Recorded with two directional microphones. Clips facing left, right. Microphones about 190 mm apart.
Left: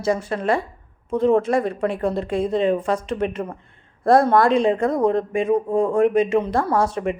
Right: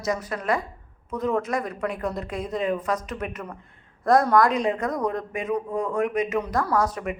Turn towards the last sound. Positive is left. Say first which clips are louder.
# left 4 dB
turn(degrees=30)  # may be behind; listen again after turning